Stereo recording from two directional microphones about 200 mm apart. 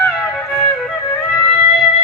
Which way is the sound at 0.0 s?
5° left (ahead or behind).